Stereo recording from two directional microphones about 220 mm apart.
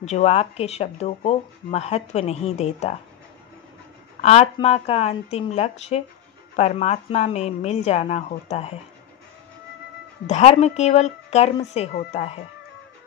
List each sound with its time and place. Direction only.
0.0 s speech: 30° left (ahead or behind)
4.2 s speech: 30° left (ahead or behind)
10.2 s speech: 30° left (ahead or behind)